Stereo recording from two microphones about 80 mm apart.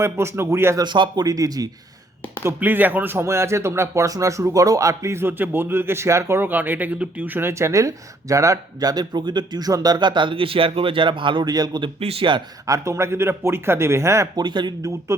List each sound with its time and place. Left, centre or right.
0.0 s speech: right
0.8 s speech: right
1.2 s speech: right
2.6 s speech: right
7.7 s speech: right
11.5 s speech: right
11.8 s speech: right
12.6 s speech: right
14.3 s speech: right
14.8 s speech: right